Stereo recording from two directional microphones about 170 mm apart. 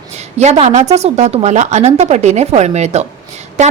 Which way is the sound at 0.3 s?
40° right (ahead or behind).